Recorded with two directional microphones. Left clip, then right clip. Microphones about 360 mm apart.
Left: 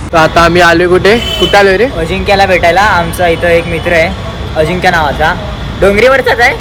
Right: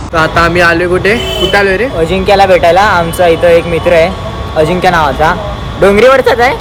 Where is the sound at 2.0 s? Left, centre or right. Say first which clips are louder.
Right 2 dB; centre.